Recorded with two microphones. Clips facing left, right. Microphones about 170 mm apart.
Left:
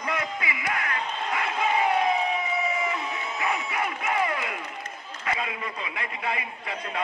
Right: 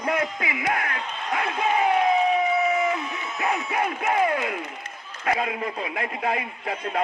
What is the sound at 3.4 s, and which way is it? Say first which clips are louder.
A man's voice: right 4 dB; 55° right (ahead or behind).